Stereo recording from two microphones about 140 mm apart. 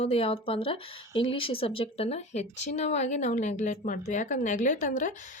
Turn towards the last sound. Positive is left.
turn(degrees=65)  # may be behind; listen again after turning